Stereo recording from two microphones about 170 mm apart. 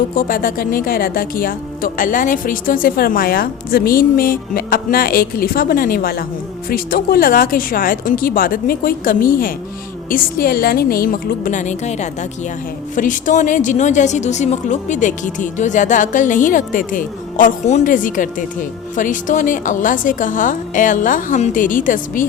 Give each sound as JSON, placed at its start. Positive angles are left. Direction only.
{"t": 0.2, "sound": "a woman's voice", "side_deg": 55}